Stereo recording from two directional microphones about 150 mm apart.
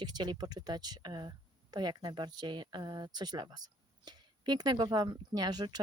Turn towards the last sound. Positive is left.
turn(degrees=-30)  # may be behind; listen again after turning